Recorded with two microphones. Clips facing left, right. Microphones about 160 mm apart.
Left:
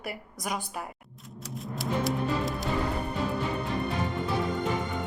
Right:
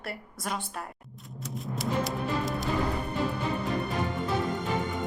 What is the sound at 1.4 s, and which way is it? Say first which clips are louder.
Music: right 2 dB; centre (ahead or behind).